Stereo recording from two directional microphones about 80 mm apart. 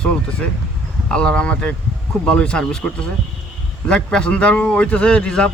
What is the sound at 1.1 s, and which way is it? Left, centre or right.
Speech, centre.